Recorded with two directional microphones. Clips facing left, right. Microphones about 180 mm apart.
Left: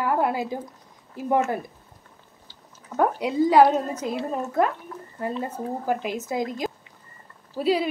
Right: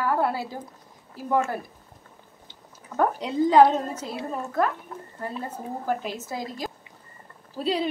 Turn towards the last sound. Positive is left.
turn(degrees=5)  # may be behind; listen again after turning